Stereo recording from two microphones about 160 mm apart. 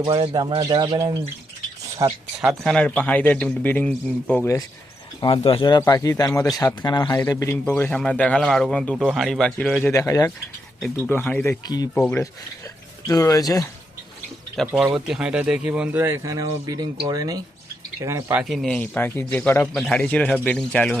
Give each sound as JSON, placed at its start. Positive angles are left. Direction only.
{"t": 0.0, "sound": "speech", "side_deg": -25}
{"t": 2.0, "sound": "speech", "side_deg": -20}
{"t": 2.4, "sound": "a man's voice", "side_deg": 0}
{"t": 5.2, "sound": "a man's voice", "side_deg": 35}
{"t": 9.9, "sound": "speech", "side_deg": 20}
{"t": 10.8, "sound": "a man's voice", "side_deg": 10}
{"t": 11.6, "sound": "speech", "side_deg": 25}
{"t": 11.9, "sound": "a man's voice", "side_deg": 15}
{"t": 14.7, "sound": "speech", "side_deg": -15}
{"t": 14.9, "sound": "speech", "side_deg": -5}
{"t": 18.3, "sound": "a man's voice", "side_deg": 0}